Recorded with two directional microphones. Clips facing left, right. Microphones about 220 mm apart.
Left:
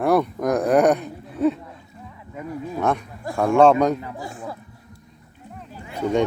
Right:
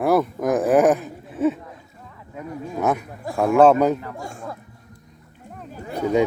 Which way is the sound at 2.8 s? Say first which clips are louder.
Right 1 dB; 5° right (ahead or behind).